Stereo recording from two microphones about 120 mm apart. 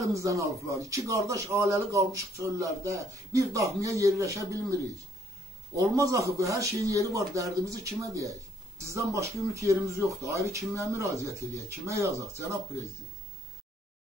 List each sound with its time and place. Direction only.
0.0 s speech: 25° right (ahead or behind)
5.8 s speech: 25° right (ahead or behind)